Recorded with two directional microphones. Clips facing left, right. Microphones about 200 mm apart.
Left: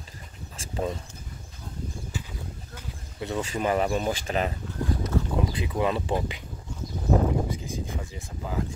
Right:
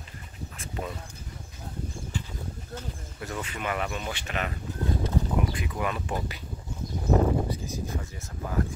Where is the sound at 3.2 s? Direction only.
25° left (ahead or behind).